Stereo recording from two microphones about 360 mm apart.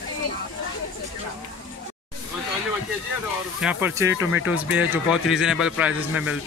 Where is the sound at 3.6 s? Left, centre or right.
Centre.